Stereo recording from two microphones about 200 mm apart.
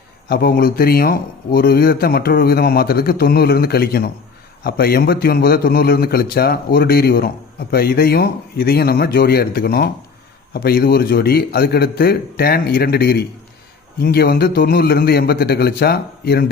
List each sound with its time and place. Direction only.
0.3 s speech: 50° left (ahead or behind)